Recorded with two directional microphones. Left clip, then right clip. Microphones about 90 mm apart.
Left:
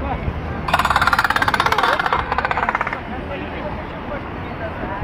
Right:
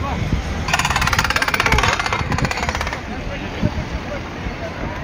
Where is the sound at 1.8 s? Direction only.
70° left (ahead or behind).